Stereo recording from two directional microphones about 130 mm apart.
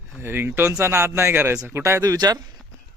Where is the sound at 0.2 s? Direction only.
15° right (ahead or behind).